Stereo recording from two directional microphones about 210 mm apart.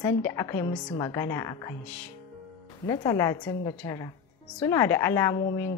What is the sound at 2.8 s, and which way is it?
A woman's voice, 15° left (ahead or behind).